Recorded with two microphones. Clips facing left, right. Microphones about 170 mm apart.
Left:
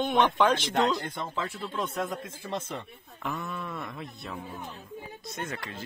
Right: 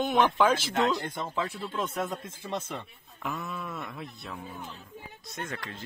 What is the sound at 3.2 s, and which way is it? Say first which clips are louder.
Speech: left 1 dB; centre (ahead or behind).